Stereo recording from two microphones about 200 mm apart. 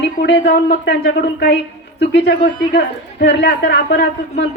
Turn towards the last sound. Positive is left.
turn(degrees=60)  # may be behind; listen again after turning